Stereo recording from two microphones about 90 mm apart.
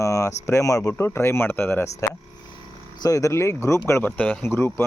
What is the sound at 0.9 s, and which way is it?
Speech, 30° left (ahead or behind).